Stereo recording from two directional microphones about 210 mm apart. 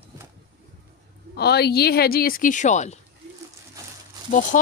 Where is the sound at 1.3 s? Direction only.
50° left (ahead or behind); by 3.0 s 35° left (ahead or behind).